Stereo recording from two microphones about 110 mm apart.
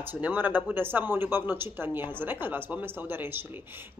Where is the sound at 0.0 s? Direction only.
20° right (ahead or behind).